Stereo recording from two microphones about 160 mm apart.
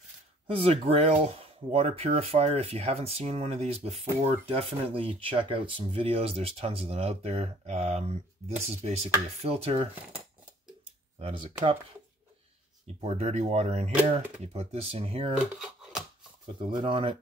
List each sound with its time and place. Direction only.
0.5 s speech: 35° right (ahead or behind)
11.1 s speech: 40° right (ahead or behind)
13.0 s speech: 40° right (ahead or behind)
15.3 s a sound: 5° right (ahead or behind)
16.5 s speech: 30° right (ahead or behind)